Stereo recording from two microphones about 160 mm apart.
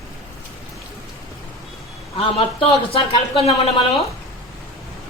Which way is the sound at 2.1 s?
35° left (ahead or behind).